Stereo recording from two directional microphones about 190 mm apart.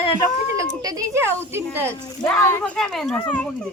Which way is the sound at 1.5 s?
10° right (ahead or behind).